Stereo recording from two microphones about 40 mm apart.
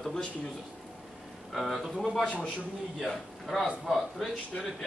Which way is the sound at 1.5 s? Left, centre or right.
Centre.